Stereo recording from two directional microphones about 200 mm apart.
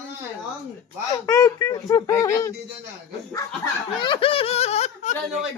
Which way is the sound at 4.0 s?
25° left (ahead or behind).